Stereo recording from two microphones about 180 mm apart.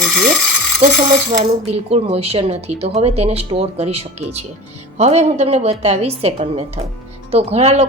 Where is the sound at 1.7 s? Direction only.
35° right (ahead or behind).